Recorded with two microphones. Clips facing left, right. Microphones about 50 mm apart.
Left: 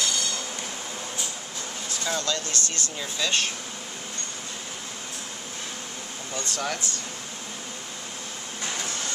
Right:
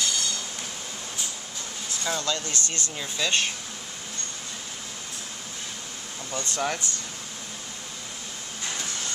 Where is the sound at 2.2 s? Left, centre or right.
Right.